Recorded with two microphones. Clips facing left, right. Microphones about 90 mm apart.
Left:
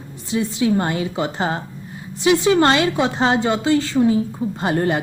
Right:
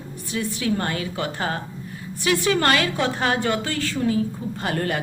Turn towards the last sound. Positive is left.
turn(degrees=25)  # may be behind; listen again after turning